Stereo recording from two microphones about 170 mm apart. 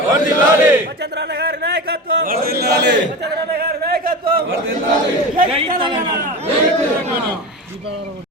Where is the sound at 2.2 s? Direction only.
60° right (ahead or behind).